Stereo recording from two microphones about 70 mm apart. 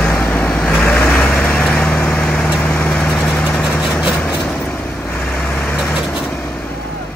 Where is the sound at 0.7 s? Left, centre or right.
Left.